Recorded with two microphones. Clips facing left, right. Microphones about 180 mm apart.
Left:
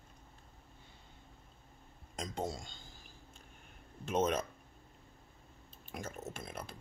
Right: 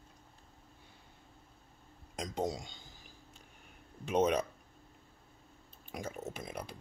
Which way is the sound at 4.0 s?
15° right (ahead or behind).